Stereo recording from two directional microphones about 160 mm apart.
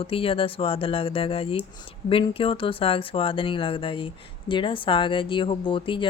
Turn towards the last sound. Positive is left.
turn(degrees=30)  # may be behind; listen again after turning